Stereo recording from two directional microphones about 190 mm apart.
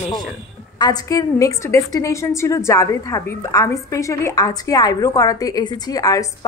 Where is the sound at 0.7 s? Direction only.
20° left (ahead or behind).